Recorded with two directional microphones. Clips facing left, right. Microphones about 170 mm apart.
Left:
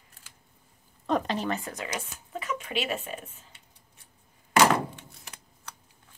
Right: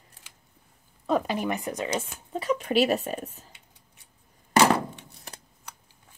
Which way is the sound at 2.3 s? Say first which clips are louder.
Right 8 dB; 35° right (ahead or behind).